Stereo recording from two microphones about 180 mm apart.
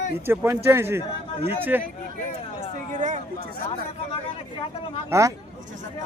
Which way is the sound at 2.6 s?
45° right (ahead or behind).